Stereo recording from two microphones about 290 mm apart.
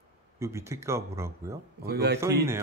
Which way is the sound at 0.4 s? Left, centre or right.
Centre.